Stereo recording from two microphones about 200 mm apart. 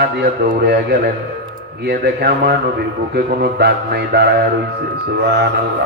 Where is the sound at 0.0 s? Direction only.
55° right (ahead or behind).